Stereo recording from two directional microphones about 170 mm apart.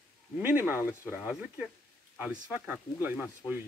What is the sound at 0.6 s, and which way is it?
Speech, 15° left (ahead or behind).